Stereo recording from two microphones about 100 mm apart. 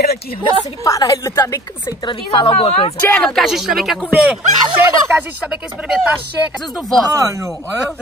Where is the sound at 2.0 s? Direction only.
55° left (ahead or behind); by 2.9 s 75° left (ahead or behind).